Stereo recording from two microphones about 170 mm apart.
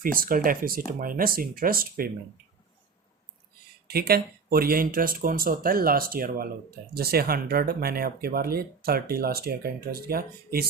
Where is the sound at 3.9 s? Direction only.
65° right (ahead or behind).